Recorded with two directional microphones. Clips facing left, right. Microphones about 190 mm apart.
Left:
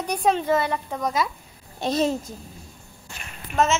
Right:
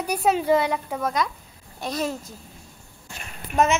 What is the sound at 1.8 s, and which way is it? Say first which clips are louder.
Speech: left 5 dB; 25° left (ahead or behind).